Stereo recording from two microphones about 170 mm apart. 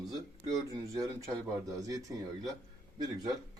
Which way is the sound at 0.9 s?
20° right (ahead or behind).